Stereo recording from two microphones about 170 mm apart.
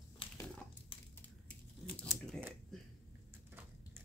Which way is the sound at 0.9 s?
30° left (ahead or behind).